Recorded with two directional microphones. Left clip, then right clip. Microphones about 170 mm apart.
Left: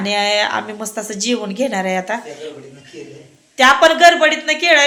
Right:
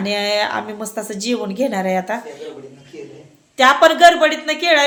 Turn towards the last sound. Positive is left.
turn(degrees=-5)  # may be behind; listen again after turning